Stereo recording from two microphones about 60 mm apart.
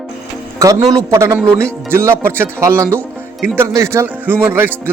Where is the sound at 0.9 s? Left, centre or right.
Right.